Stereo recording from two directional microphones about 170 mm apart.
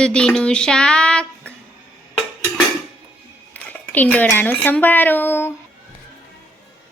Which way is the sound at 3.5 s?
10° left (ahead or behind).